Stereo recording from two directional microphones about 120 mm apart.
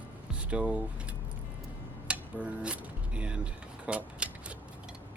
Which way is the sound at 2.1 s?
10° right (ahead or behind).